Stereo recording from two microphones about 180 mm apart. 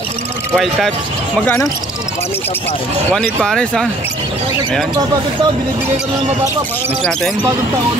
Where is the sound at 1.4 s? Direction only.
15° left (ahead or behind).